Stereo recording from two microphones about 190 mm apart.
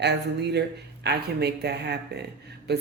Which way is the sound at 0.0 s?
60° right (ahead or behind).